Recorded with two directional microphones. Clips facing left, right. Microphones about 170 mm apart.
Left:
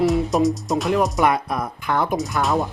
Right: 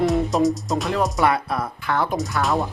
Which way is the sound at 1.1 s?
15° left (ahead or behind).